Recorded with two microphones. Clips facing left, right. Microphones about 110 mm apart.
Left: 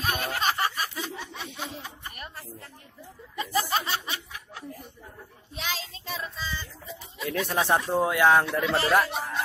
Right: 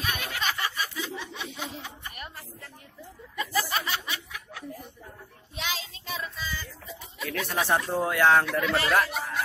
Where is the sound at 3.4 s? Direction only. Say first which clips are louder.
Left 2 dB; 30° left (ahead or behind).